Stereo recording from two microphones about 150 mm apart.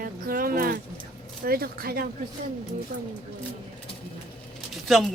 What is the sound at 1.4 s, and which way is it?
Speech, 90° right.